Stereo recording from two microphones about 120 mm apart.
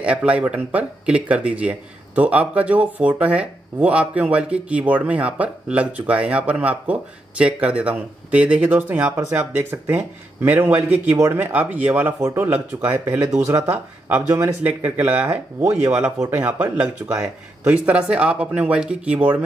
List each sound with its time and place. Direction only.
0.0 s speech: 10° right (ahead or behind)